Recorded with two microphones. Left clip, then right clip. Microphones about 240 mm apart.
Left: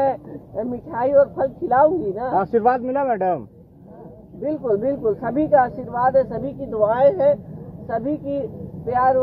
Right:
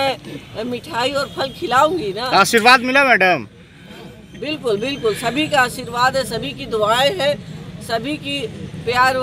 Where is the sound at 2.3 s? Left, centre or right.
Right.